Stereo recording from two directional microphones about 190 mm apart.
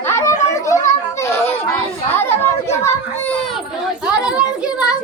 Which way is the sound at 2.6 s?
15° left (ahead or behind).